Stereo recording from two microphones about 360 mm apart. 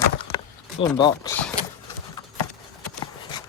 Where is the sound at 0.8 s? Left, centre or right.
Centre.